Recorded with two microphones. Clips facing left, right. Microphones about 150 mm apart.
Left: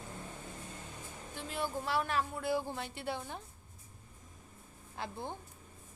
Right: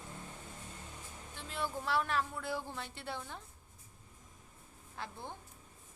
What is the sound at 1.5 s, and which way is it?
A woman's voice, 5° left (ahead or behind).